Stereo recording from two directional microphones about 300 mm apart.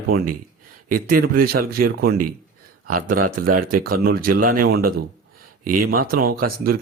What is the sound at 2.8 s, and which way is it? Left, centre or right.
Speech, right.